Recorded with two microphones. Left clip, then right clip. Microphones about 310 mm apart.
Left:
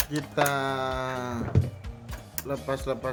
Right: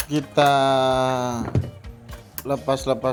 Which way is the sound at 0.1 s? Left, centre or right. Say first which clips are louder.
Right 10 dB; centre.